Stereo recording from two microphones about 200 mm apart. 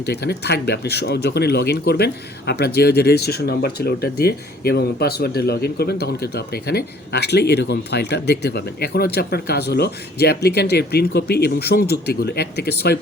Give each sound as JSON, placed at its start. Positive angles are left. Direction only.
{"t": 0.0, "sound": "speech", "side_deg": 55}